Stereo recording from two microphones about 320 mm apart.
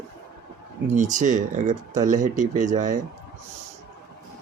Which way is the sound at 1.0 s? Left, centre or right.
Right.